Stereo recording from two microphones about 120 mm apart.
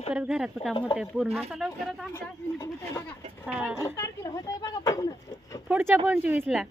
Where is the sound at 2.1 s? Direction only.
25° left (ahead or behind).